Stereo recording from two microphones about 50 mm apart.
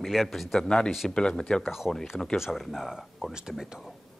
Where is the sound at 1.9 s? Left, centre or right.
Centre.